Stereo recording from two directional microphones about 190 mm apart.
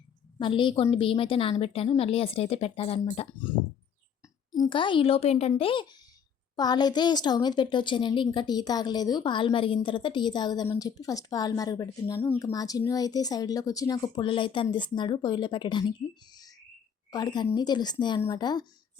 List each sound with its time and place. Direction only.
0.3 s speech: 25° left (ahead or behind)
4.5 s speech: 25° left (ahead or behind)